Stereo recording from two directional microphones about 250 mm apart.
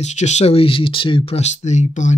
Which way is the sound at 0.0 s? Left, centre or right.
Left.